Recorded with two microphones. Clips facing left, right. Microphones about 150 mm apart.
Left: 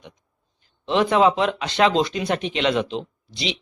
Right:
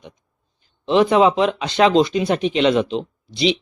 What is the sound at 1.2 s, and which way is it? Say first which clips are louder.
Speech: right 3 dB; 20° right (ahead or behind).